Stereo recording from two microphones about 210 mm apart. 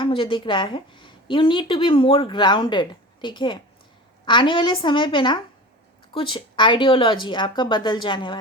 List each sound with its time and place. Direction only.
0.0 s a woman's voice: 25° left (ahead or behind)